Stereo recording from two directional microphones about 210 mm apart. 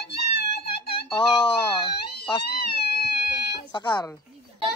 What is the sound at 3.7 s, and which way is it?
Speech, 20° left (ahead or behind).